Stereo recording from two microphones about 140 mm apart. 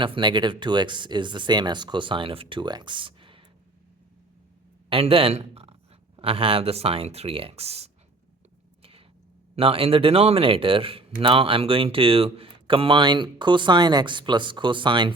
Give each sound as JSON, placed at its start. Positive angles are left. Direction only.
{"t": 0.0, "sound": "speech", "side_deg": -35}
{"t": 4.9, "sound": "a man's voice", "side_deg": -40}
{"t": 8.8, "sound": "a sound", "side_deg": -40}
{"t": 9.6, "sound": "speech", "side_deg": -40}